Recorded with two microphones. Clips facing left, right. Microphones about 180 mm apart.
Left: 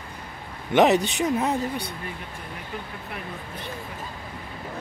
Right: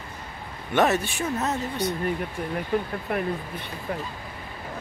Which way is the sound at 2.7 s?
55° right (ahead or behind).